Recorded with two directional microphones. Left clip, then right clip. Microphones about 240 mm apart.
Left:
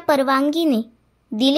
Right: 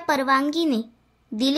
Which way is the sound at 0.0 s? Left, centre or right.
Centre.